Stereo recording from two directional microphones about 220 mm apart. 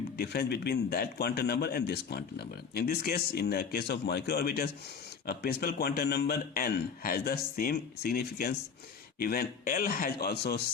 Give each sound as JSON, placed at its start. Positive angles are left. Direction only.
{"t": 0.2, "sound": "a man's voice", "side_deg": 45}